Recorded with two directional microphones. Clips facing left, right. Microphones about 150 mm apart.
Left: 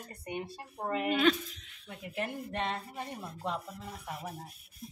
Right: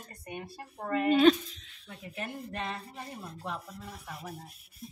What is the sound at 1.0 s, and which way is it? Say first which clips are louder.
Speech: right 6 dB; 30° right (ahead or behind).